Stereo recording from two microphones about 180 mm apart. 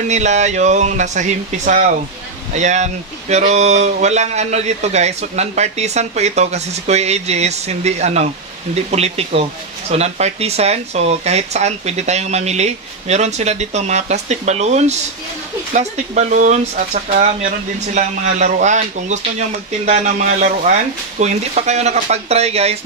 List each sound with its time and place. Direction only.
0.1 s speech: 40° right (ahead or behind)